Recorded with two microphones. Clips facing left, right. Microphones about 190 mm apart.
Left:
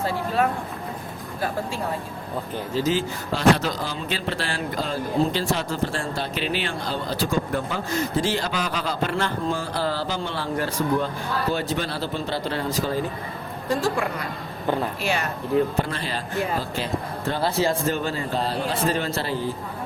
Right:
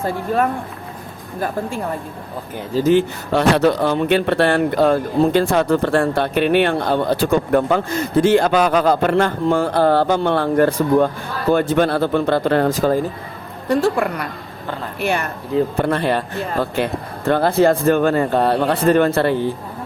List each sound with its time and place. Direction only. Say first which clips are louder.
2.8 s speech: right 13 dB; 65° right (ahead or behind)